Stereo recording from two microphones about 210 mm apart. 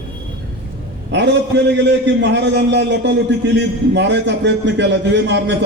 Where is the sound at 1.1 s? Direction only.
55° right (ahead or behind).